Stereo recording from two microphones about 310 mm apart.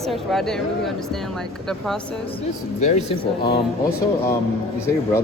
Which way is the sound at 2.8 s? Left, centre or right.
Left.